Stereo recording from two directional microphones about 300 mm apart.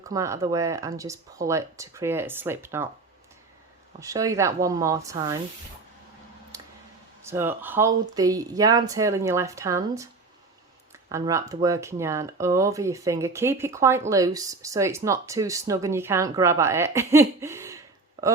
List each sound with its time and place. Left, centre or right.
0.0 s speech: centre
4.0 s speech: centre
6.5 s clicking: centre
7.2 s speech: centre
11.1 s speech: centre